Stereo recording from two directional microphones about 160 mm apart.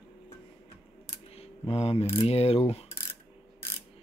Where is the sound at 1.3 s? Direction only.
40° left (ahead or behind).